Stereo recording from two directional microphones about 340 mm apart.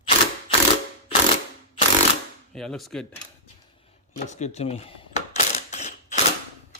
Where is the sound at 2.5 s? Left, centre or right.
Centre.